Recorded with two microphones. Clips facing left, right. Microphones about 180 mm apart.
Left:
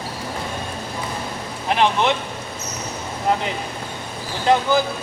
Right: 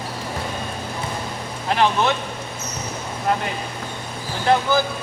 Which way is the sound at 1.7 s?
20° left (ahead or behind).